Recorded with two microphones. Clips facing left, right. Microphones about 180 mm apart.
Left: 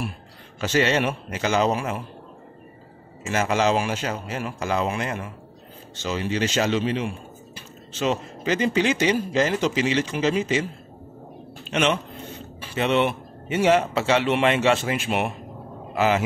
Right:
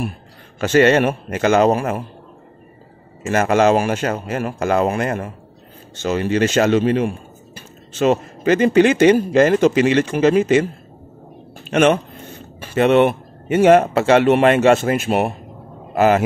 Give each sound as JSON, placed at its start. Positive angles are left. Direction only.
{"t": 0.6, "sound": "speech", "side_deg": -55}
{"t": 3.3, "sound": "a man's voice", "side_deg": -55}